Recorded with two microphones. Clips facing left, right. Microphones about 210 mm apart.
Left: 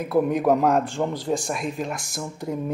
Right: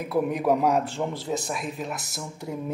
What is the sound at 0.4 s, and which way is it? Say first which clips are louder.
Speech: left 1 dB; 50° left (ahead or behind).